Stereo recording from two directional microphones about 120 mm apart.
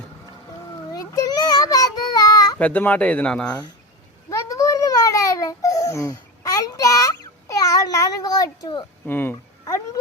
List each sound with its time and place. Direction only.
0.9 s child singing: 30° left (ahead or behind)
2.6 s speech: 15° left (ahead or behind)
4.3 s babbling: 25° left (ahead or behind)
9.0 s speech: 15° left (ahead or behind)
9.6 s speech: 30° left (ahead or behind)